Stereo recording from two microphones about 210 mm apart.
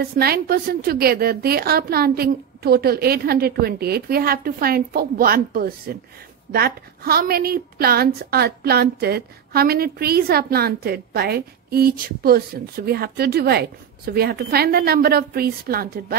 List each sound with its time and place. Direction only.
0.0 s a woman's voice: 45° right (ahead or behind)